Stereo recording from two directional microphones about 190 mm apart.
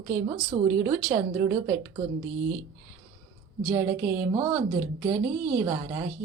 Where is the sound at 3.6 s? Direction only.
15° right (ahead or behind).